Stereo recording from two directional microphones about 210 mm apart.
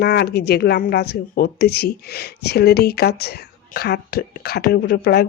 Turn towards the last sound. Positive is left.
turn(degrees=50)  # may be behind; listen again after turning